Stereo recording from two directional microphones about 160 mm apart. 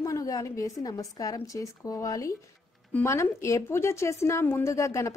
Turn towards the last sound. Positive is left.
turn(degrees=20)  # may be behind; listen again after turning